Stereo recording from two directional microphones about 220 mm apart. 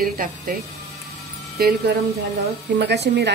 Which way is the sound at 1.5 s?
45° right (ahead or behind).